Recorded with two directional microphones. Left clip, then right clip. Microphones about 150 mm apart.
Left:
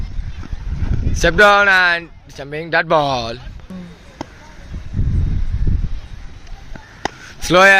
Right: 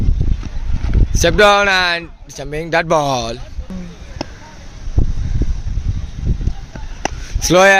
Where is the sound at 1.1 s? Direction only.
5° right (ahead or behind).